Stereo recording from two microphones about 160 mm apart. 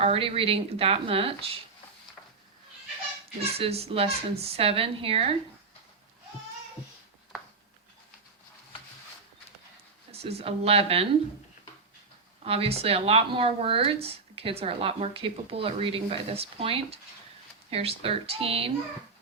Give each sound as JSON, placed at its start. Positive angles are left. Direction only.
{"t": 0.0, "sound": "speech", "side_deg": -35}
{"t": 3.6, "sound": "speech", "side_deg": -40}
{"t": 10.1, "sound": "speech", "side_deg": -40}
{"t": 12.5, "sound": "speech", "side_deg": -40}